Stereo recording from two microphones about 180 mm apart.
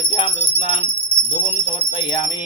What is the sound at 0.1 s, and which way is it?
Music, 30° left (ahead or behind).